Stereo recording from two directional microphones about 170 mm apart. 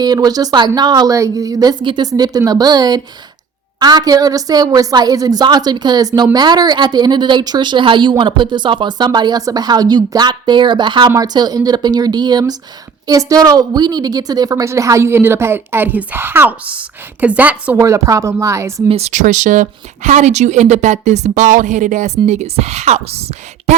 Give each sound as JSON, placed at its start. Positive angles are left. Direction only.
{"t": 0.0, "sound": "a woman's voice", "side_deg": -25}
{"t": 18.9, "sound": "speech", "side_deg": -40}